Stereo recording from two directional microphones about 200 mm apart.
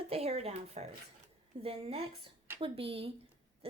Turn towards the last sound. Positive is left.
turn(degrees=-25)  # may be behind; listen again after turning